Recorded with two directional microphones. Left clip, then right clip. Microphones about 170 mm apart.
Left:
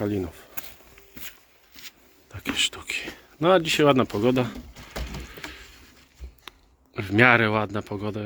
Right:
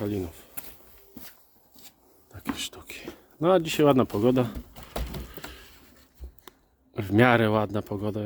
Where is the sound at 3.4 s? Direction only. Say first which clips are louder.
Left 2 dB; 10° right (ahead or behind).